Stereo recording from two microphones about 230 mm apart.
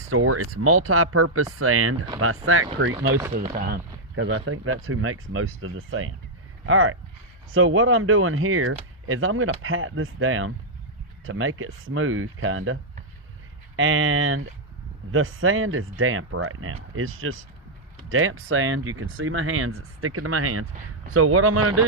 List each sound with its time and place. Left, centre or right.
0.0 s speech: right
3.3 s speech: right